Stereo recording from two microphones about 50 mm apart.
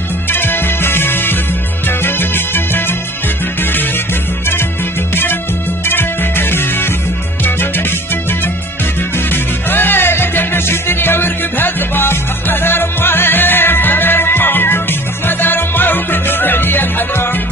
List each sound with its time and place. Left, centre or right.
0.3 s music: left